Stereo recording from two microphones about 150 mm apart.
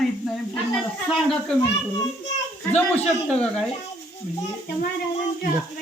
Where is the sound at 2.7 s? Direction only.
10° left (ahead or behind).